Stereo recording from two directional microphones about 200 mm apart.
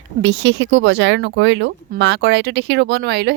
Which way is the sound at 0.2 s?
65° right (ahead or behind).